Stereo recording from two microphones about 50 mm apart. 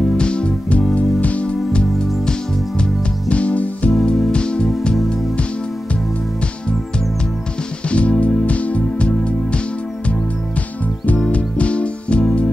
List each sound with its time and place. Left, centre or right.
0.0 s music: centre
7.9 s music: left
11.2 s music: left